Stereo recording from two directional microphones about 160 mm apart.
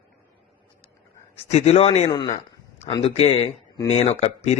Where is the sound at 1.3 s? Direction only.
40° left (ahead or behind).